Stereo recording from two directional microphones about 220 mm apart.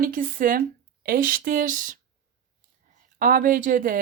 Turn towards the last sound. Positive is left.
turn(degrees=-40)  # may be behind; listen again after turning